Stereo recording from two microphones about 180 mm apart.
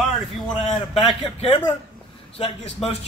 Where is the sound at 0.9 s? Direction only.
30° left (ahead or behind).